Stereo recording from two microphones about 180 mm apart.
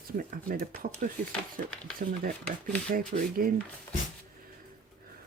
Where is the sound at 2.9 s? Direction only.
50° right (ahead or behind).